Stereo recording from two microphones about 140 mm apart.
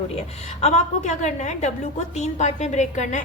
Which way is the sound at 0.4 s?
55° left (ahead or behind).